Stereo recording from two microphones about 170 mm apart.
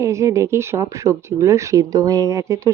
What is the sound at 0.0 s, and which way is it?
Speech, 15° right (ahead or behind).